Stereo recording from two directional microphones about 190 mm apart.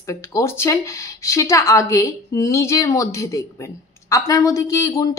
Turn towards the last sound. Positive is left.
turn(degrees=15)  # may be behind; listen again after turning